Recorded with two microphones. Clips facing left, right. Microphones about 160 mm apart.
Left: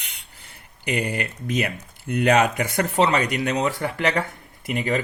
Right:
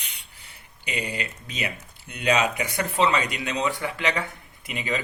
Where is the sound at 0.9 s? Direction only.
60° left (ahead or behind).